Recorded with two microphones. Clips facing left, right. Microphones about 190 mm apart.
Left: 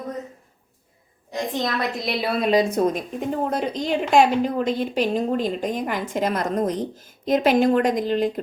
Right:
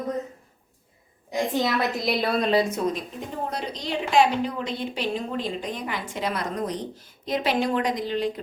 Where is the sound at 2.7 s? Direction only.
50° left (ahead or behind).